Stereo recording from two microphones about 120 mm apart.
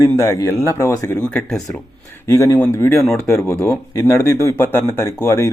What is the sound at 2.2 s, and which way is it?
Speech, 25° left (ahead or behind).